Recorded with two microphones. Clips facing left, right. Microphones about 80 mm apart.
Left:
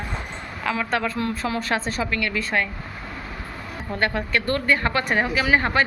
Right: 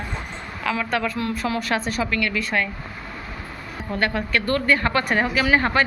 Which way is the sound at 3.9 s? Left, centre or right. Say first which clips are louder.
Even; left.